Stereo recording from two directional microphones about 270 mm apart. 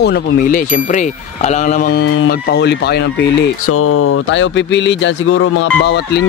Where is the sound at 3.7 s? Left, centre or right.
Left.